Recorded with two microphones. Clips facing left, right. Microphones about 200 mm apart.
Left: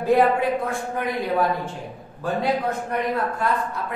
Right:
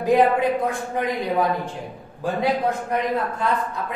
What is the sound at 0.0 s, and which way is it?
Speech, 15° right (ahead or behind).